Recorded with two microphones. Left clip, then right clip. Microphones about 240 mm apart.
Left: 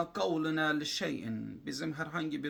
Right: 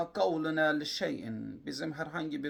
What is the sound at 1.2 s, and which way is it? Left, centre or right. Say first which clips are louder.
Speech: even; centre.